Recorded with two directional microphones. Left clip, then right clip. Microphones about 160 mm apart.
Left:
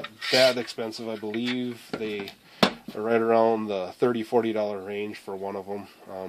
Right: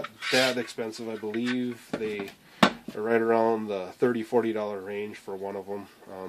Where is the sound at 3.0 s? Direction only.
40° left (ahead or behind).